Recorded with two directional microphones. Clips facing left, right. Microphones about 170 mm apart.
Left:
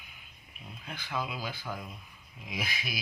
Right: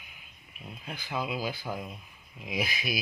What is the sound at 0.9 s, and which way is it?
Speech, 10° right (ahead or behind).